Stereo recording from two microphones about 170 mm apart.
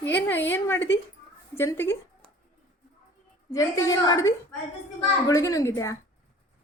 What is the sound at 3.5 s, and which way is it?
A woman's voice, 20° left (ahead or behind).